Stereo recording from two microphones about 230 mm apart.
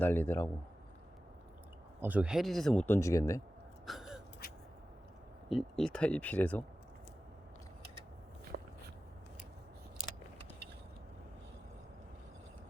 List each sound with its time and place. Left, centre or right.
0.0 s a man's voice: centre
2.0 s speech: centre
3.8 s gasp: centre
5.5 s speech: centre
8.5 s walk: right